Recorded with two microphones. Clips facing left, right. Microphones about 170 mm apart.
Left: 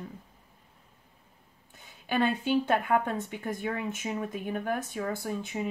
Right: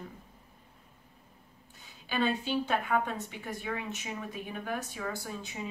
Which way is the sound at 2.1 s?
55° left (ahead or behind).